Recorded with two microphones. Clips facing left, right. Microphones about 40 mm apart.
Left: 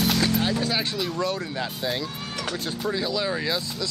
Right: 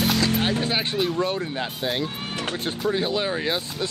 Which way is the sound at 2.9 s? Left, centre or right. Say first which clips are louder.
Right 2 dB; right.